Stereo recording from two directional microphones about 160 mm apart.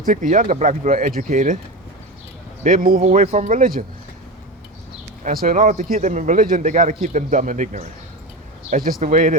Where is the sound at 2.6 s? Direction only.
60° right (ahead or behind).